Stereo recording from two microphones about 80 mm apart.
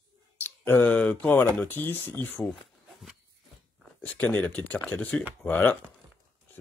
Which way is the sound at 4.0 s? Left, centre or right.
Centre.